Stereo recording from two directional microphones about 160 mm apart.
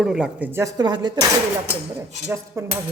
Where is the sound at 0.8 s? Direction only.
25° right (ahead or behind).